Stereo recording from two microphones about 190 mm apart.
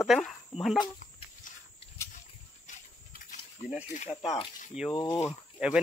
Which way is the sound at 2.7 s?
40° left (ahead or behind).